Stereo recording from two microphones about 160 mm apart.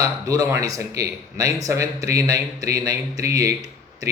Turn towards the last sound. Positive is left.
turn(degrees=-20)  # may be behind; listen again after turning